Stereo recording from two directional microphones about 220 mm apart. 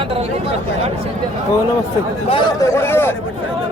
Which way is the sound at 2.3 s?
20° left (ahead or behind).